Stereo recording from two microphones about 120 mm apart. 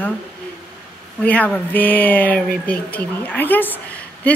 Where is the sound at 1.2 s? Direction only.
15° left (ahead or behind).